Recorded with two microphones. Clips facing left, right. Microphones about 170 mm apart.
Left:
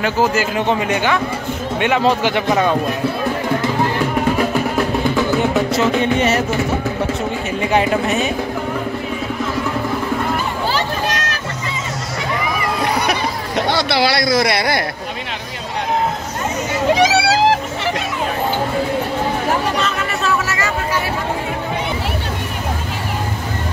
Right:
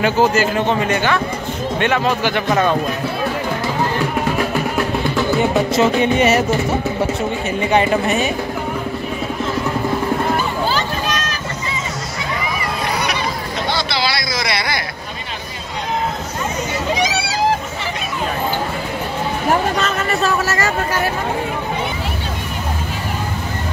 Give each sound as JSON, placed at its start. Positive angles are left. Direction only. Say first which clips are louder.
{"t": 0.0, "sound": "a woman's voice", "louder": "right 2 dB", "side_deg": 5}
{"t": 0.6, "sound": "a man's voice", "louder": "even", "side_deg": 15}
{"t": 2.4, "sound": "a woman's voice", "louder": "right 1 dB", "side_deg": 5}
{"t": 5.7, "sound": "music", "louder": "right 1 dB", "side_deg": -15}
{"t": 7.6, "sound": "a woman's voice", "louder": "right 1 dB", "side_deg": 0}
{"t": 10.7, "sound": "a sound", "louder": "left 1 dB", "side_deg": 70}
{"t": 13.0, "sound": "a sound", "louder": "left 2 dB", "side_deg": 55}
{"t": 17.1, "sound": "cat", "louder": "left 4 dB", "side_deg": 90}
{"t": 19.8, "sound": "a sound", "louder": "right 2 dB", "side_deg": -40}